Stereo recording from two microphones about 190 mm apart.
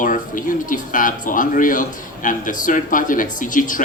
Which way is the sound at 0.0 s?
45° left (ahead or behind).